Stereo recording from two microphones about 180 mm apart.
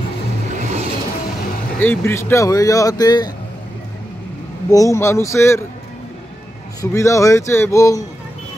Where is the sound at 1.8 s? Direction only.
10° left (ahead or behind).